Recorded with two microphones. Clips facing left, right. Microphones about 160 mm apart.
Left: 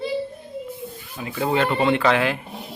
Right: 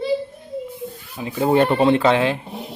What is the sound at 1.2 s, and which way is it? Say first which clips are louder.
Speech: right 3 dB; 20° right (ahead or behind).